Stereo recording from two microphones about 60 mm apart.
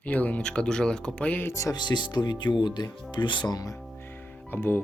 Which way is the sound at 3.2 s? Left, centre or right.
Left.